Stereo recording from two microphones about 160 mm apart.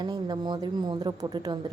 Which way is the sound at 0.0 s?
25° right (ahead or behind).